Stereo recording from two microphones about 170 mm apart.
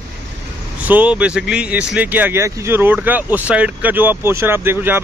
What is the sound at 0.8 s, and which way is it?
Speech, 10° right (ahead or behind).